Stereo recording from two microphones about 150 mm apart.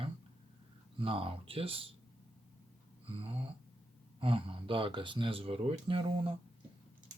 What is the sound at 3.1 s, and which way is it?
Speech, 35° right (ahead or behind).